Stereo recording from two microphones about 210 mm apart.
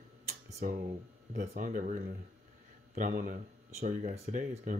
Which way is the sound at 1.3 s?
40° right (ahead or behind).